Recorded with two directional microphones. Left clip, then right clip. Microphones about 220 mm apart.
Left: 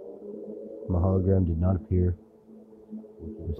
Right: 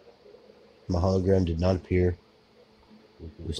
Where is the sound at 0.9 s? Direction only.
5° right (ahead or behind).